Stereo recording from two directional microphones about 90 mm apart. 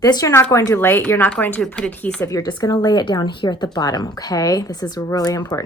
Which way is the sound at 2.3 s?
45° left (ahead or behind).